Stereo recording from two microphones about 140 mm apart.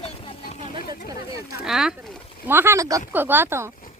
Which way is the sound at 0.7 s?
90° left.